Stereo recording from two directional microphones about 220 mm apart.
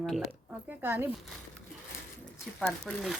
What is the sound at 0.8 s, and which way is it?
Speech, 10° right (ahead or behind).